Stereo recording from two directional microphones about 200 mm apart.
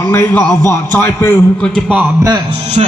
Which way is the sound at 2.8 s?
30° right (ahead or behind).